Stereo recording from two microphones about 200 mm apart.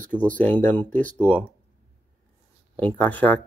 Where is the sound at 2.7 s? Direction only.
10° left (ahead or behind).